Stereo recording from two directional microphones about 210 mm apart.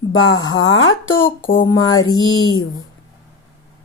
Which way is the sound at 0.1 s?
65° left (ahead or behind).